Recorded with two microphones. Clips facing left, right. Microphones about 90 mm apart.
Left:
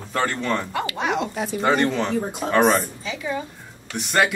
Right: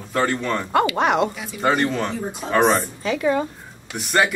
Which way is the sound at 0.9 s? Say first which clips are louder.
Right 5 dB; 55° right (ahead or behind).